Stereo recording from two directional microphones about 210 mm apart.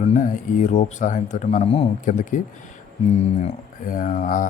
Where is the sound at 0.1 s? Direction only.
35° left (ahead or behind).